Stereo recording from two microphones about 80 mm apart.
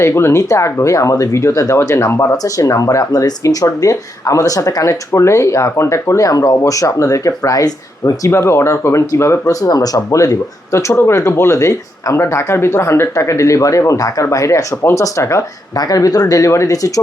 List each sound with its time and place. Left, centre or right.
0.0 s speech: left
8.3 s speech: left
15.8 s speech: left